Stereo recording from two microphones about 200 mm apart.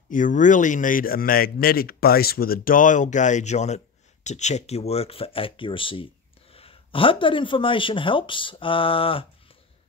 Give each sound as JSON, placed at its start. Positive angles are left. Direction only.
{"t": 0.1, "sound": "speech", "side_deg": 40}